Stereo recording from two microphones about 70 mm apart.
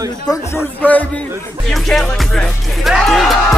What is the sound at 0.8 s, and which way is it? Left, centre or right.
Speech, left.